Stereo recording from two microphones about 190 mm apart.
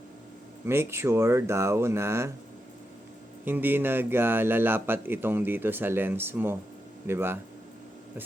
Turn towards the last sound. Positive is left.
turn(degrees=-10)  # may be behind; listen again after turning